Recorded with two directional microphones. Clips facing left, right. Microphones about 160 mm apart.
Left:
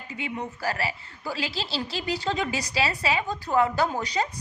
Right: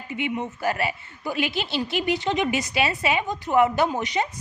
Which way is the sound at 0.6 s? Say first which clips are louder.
Right 3 dB; 25° right (ahead or behind).